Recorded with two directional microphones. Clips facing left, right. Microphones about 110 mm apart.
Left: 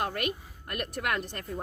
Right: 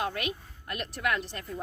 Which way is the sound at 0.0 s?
50° left (ahead or behind).